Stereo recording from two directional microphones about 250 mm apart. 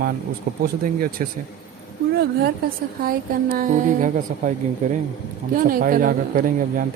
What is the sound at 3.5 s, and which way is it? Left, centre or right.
Speech, right.